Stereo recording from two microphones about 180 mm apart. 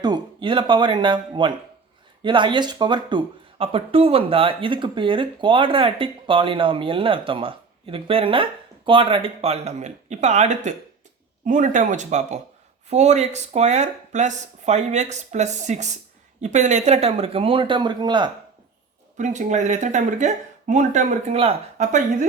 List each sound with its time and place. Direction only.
0.0 s speech: 25° right (ahead or behind)
19.1 s speech: 40° right (ahead or behind)